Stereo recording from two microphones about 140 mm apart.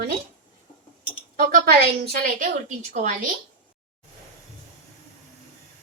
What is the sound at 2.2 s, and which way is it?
Speech, 70° right (ahead or behind).